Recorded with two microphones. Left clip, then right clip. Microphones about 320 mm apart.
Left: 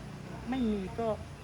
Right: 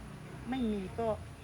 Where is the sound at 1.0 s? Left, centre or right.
Centre.